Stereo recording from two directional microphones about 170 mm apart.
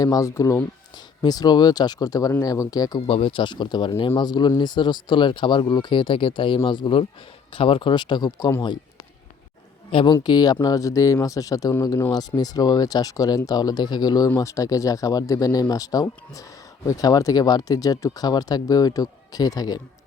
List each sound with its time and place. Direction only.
0.0 s speech: 20° left (ahead or behind)
9.9 s speech: 30° left (ahead or behind)